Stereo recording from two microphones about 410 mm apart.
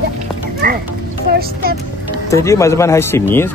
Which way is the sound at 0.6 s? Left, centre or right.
Right.